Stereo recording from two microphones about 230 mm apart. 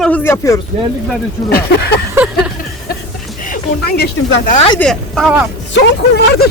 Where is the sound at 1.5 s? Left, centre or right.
Left.